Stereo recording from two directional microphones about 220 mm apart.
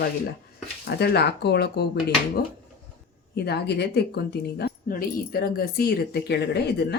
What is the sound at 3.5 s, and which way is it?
Speech, 50° left (ahead or behind).